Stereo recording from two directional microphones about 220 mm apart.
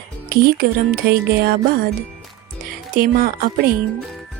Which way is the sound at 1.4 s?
45° right (ahead or behind).